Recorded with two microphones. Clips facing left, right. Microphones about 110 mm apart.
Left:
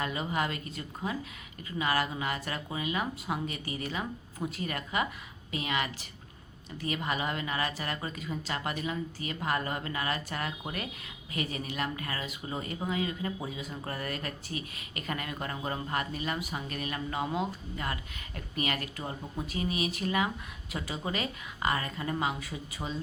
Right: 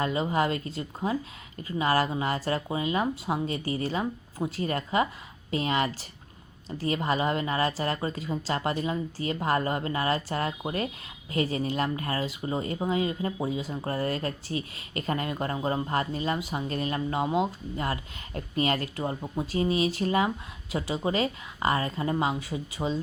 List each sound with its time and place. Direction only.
0.0 s speech: 30° right (ahead or behind)